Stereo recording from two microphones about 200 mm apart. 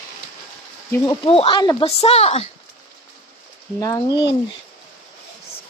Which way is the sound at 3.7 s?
15° left (ahead or behind).